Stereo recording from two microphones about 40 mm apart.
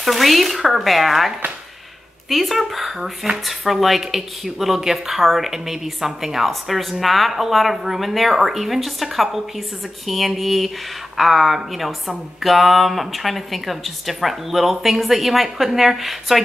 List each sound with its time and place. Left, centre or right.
0.0 s a woman's voice: centre